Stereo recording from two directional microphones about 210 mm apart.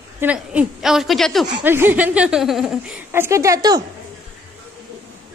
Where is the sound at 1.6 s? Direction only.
10° right (ahead or behind).